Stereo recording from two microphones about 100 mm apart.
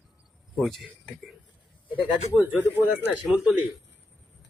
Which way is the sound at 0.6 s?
Centre (ahead or behind).